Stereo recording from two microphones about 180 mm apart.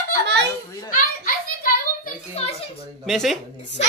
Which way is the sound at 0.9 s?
50° left (ahead or behind).